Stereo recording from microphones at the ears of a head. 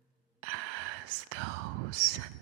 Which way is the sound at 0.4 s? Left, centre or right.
Right.